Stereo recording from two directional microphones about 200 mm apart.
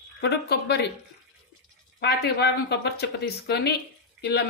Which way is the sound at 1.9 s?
55° left (ahead or behind).